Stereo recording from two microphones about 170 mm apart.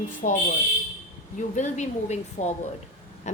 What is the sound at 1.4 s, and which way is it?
A woman's voice, 45° left (ahead or behind).